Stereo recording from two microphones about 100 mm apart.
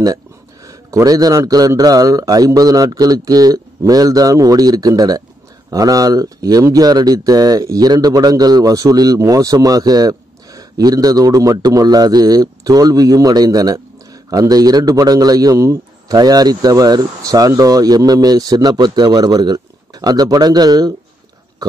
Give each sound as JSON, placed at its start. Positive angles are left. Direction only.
{"t": 0.7, "sound": "speech", "side_deg": -35}